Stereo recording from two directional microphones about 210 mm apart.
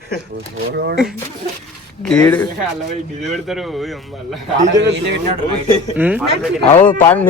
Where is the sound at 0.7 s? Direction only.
50° right (ahead or behind).